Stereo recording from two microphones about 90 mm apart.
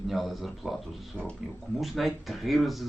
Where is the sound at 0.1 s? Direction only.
Centre (ahead or behind).